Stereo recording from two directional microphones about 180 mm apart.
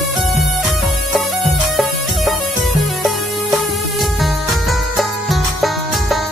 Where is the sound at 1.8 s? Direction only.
Centre (ahead or behind).